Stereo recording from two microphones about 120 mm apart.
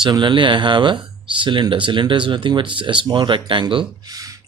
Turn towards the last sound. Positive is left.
turn(degrees=-30)  # may be behind; listen again after turning